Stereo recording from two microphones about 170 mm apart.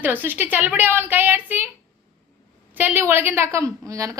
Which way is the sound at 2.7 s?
10° right (ahead or behind).